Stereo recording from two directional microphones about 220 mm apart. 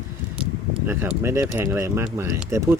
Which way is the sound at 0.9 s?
10° right (ahead or behind).